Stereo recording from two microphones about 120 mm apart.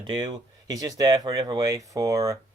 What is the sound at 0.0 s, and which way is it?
Speech, 40° right (ahead or behind).